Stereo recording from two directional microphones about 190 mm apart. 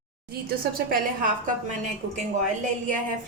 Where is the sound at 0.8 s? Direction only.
45° right (ahead or behind).